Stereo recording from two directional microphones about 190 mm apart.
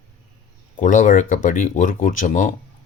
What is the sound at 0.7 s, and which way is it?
Speech, 40° left (ahead or behind).